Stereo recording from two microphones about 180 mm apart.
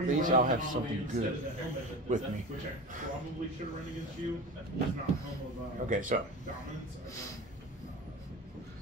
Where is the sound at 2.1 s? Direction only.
40° right (ahead or behind).